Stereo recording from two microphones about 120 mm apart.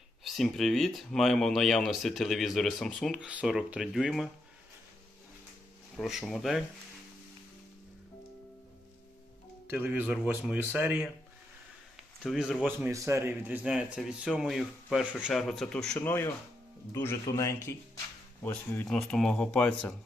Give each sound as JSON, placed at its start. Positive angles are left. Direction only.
{"t": 0.3, "sound": "speech", "side_deg": 0}
{"t": 3.2, "sound": "speech", "side_deg": -10}
{"t": 6.0, "sound": "speech", "side_deg": 0}
{"t": 9.6, "sound": "speech", "side_deg": -15}
{"t": 11.9, "sound": "a sound", "side_deg": 0}
{"t": 12.9, "sound": "speech", "side_deg": -25}
{"t": 13.7, "sound": "speech", "side_deg": -5}
{"t": 16.0, "sound": "a man's voice", "side_deg": 20}
{"t": 18.9, "sound": "speech", "side_deg": 5}